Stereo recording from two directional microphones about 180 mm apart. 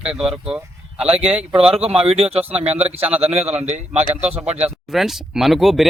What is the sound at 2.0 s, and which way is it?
Speech, 35° right (ahead or behind).